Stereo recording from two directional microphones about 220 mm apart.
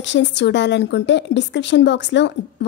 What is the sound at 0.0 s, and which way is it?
A woman's voice, 55° left (ahead or behind).